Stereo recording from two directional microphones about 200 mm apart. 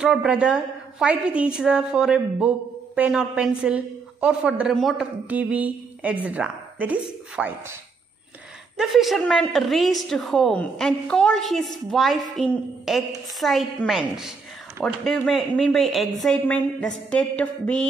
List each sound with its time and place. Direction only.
0.0 s a woman's voice: 5° right (ahead or behind)
8.7 s a woman's voice: centre (ahead or behind)